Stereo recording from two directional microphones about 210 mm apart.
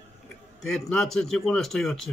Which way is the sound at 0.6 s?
Centre (ahead or behind).